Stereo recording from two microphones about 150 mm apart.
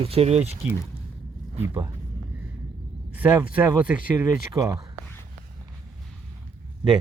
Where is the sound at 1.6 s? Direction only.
20° right (ahead or behind).